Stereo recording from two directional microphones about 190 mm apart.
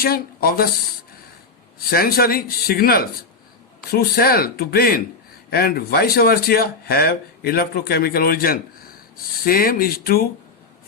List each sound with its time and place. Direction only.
0.0 s speech: 50° left (ahead or behind)
1.9 s speech: 55° left (ahead or behind)